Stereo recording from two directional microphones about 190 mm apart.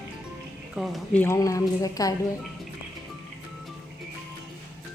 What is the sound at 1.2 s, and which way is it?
Speech, 15° left (ahead or behind).